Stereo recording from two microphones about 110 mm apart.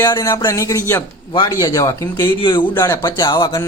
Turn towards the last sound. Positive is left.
turn(degrees=40)  # may be behind; listen again after turning